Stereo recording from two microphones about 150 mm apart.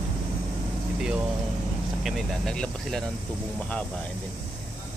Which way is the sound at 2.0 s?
5° left (ahead or behind).